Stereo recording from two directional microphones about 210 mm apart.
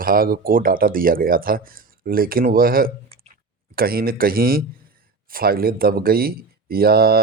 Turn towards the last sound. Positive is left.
turn(degrees=-45)  # may be behind; listen again after turning